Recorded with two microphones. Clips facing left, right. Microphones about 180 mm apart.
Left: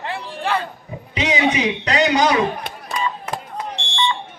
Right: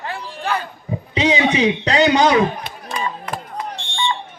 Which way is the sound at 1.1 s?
30° right (ahead or behind).